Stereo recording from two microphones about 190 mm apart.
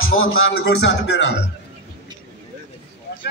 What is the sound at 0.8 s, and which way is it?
Speech, 65° left (ahead or behind).